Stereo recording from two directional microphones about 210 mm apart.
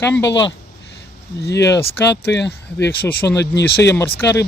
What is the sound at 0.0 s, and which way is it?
Speech, 10° left (ahead or behind).